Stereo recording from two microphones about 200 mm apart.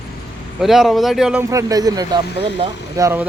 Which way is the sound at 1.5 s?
15° right (ahead or behind).